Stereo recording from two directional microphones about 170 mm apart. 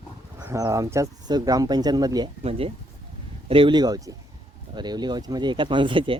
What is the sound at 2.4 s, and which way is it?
Speech, 35° right (ahead or behind).